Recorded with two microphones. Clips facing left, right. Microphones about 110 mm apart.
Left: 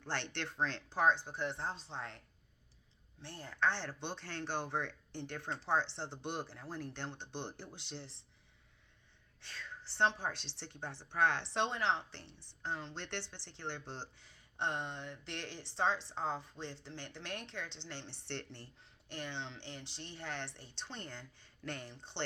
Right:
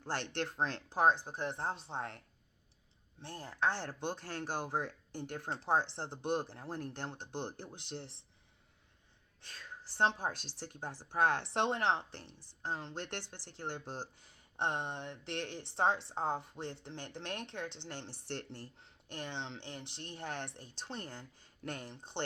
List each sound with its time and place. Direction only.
0.0 s speech: 40° right (ahead or behind)
0.4 s speech: 20° right (ahead or behind)
0.9 s speech: 45° right (ahead or behind)
9.5 s speech: 45° right (ahead or behind)
12.6 s speech: 45° right (ahead or behind)
18.8 s a sound: 55° right (ahead or behind)
19.5 s speech: 50° right (ahead or behind)